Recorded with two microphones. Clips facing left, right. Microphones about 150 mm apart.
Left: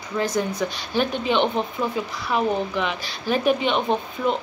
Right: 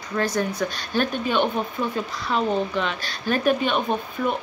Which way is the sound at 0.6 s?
15° left (ahead or behind).